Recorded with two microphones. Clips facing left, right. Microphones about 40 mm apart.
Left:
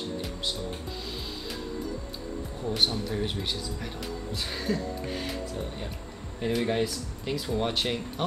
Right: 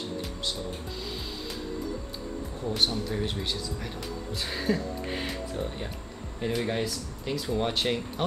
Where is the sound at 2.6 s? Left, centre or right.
Centre.